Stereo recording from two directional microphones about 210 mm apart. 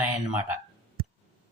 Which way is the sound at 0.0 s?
10° right (ahead or behind).